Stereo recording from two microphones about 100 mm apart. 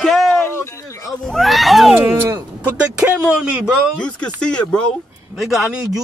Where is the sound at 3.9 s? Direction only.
10° left (ahead or behind).